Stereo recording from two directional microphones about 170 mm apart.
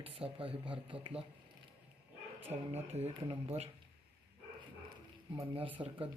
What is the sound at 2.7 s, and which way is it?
Speech, 40° right (ahead or behind).